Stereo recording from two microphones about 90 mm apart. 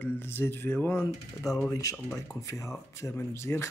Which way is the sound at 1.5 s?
Centre (ahead or behind).